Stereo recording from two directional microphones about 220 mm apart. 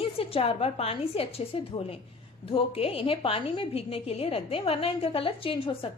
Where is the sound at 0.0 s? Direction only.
25° left (ahead or behind).